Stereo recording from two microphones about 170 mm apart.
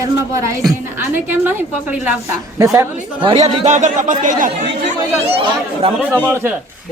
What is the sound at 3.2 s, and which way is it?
Speech, 35° right (ahead or behind).